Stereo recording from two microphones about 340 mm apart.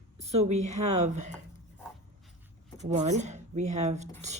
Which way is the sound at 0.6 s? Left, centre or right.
Right.